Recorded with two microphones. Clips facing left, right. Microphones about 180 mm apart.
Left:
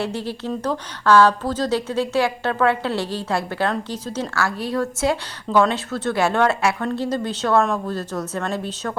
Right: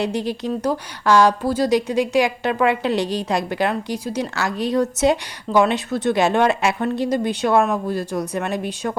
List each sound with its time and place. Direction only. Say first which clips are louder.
0.0 s a woman's voice: right 3 dB; 15° right (ahead or behind)